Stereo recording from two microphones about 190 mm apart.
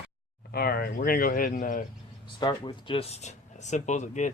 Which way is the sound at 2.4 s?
25° left (ahead or behind).